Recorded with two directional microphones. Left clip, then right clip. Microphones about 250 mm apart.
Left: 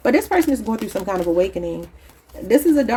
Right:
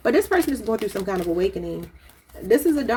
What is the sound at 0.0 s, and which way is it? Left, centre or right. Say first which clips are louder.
Speech: left 2 dB; left.